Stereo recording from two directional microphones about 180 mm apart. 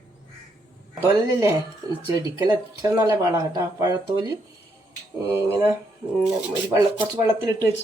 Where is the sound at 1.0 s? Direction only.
15° right (ahead or behind).